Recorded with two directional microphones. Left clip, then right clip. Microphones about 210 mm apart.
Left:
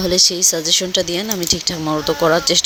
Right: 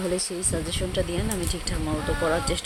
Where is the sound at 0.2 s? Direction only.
20° left (ahead or behind).